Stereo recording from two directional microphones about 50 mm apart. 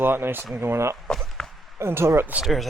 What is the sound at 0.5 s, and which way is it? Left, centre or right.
Speech, right.